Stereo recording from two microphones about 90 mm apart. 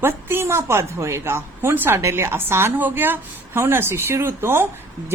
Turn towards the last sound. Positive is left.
turn(degrees=-30)  # may be behind; listen again after turning